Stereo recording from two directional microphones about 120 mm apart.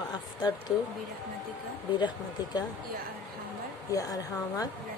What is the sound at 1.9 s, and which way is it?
Speech, 35° left (ahead or behind).